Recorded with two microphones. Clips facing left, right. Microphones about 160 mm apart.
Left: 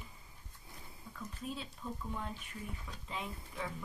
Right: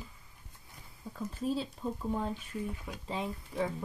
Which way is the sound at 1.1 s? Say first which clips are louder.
Right 10 dB; 35° right (ahead or behind).